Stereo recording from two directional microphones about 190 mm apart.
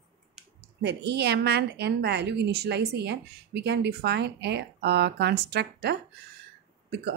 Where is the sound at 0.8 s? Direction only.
60° right (ahead or behind).